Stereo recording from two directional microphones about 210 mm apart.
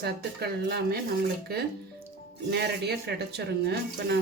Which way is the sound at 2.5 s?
50° right (ahead or behind).